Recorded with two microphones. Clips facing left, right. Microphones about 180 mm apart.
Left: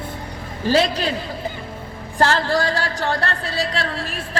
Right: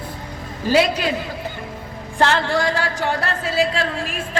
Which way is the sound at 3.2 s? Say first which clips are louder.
Right 4 dB; 35° left (ahead or behind).